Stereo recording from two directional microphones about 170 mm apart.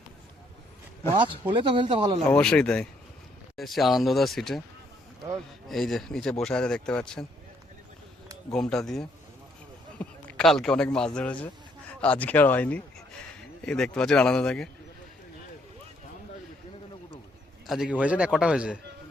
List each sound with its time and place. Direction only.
1.1 s speech: 30° right (ahead or behind)
2.2 s speech: 5° left (ahead or behind)
5.6 s speech: centre (ahead or behind)
8.5 s speech: 5° left (ahead or behind)
10.0 s a sound: 5° left (ahead or behind)
10.9 s speech: 5° left (ahead or behind)
17.7 s speech: 5° right (ahead or behind)